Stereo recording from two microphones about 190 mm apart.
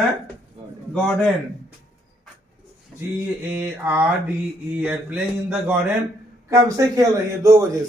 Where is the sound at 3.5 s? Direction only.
10° right (ahead or behind).